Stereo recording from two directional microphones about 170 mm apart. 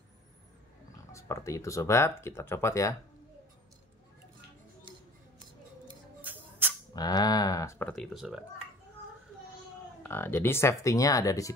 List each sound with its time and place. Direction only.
1.1 s speech: 15° left (ahead or behind)
6.3 s music: 10° right (ahead or behind)
6.9 s speech: 20° left (ahead or behind)
7.9 s speech: centre (ahead or behind)
10.0 s speech: 15° left (ahead or behind)